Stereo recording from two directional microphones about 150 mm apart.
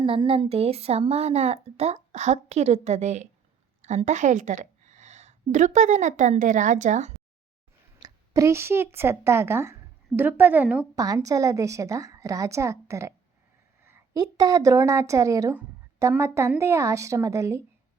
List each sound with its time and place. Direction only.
0.0 s a woman's voice: 35° right (ahead or behind); by 7.1 s 55° right (ahead or behind)
7.9 s speech: 25° right (ahead or behind); by 10.8 s 10° right (ahead or behind)
10.9 s a woman's voice: 25° right (ahead or behind)